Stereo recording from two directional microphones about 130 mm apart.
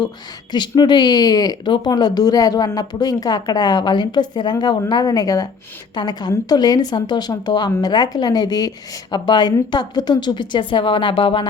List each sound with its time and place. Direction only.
0.5 s speech: 35° left (ahead or behind)